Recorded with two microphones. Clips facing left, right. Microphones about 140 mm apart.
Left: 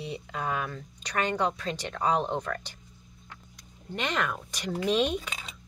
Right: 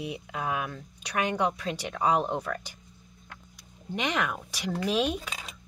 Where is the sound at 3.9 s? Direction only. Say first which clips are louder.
Right 1 dB; 10° right (ahead or behind).